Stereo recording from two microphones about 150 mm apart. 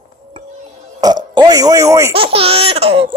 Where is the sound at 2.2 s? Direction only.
40° right (ahead or behind).